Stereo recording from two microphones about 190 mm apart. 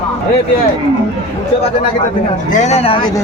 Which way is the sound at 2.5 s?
40° left (ahead or behind).